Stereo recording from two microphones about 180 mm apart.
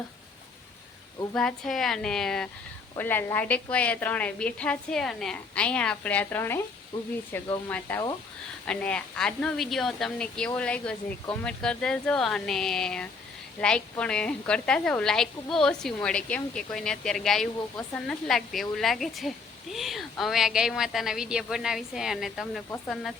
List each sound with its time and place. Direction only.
1.3 s a woman's voice: 5° left (ahead or behind)